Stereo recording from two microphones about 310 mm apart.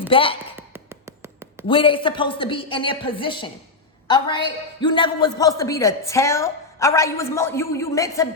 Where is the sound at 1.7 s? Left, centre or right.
Centre.